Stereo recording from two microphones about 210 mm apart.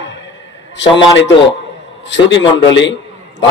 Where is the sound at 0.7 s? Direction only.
60° left (ahead or behind).